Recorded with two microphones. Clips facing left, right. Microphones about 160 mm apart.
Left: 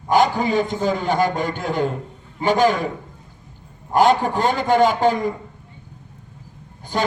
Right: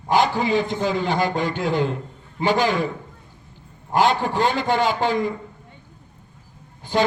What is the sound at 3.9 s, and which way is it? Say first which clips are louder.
A man's voice: left 3 dB; 45° left (ahead or behind).